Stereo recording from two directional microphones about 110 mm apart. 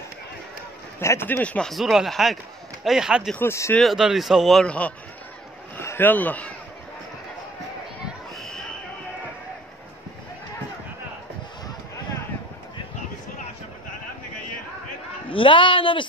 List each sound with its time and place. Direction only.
1.0 s speech: 20° left (ahead or behind)
1.7 s speech: centre (ahead or behind)
3.3 s speech: 25° left (ahead or behind)
3.7 s speech: centre (ahead or behind)
5.8 s speech: 20° left (ahead or behind)
8.4 s basketball bounce: 5° left (ahead or behind)
15.2 s a woman's voice: 50° left (ahead or behind)